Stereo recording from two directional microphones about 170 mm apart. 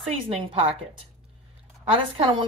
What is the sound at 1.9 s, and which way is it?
Speech, 30° right (ahead or behind).